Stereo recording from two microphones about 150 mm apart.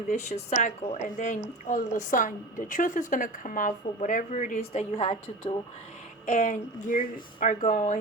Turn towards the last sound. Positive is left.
turn(degrees=55)  # may be behind; listen again after turning